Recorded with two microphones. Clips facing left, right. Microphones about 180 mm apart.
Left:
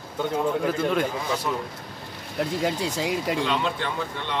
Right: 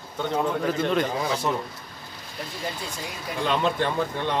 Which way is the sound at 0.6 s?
5° left (ahead or behind).